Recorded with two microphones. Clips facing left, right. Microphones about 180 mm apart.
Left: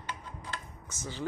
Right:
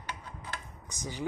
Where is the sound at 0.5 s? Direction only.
15° right (ahead or behind).